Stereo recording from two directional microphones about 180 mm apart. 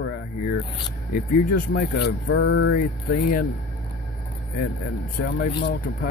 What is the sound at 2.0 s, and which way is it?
Speech, 75° left (ahead or behind).